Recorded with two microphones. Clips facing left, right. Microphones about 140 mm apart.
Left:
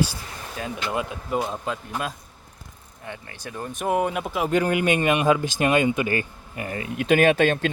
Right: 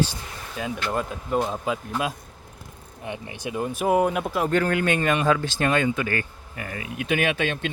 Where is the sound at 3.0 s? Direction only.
15° right (ahead or behind); by 4.5 s centre (ahead or behind).